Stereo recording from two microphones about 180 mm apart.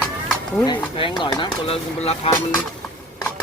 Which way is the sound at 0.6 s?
25° left (ahead or behind).